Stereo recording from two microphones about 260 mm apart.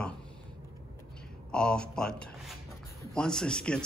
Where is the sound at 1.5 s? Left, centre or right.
Centre.